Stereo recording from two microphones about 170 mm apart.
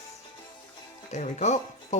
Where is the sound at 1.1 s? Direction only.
40° left (ahead or behind).